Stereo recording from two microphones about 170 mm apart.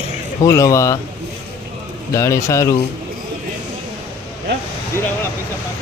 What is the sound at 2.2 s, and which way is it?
Speech, 20° left (ahead or behind).